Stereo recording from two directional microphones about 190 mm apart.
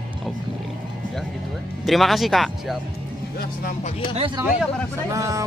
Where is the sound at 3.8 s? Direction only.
30° left (ahead or behind).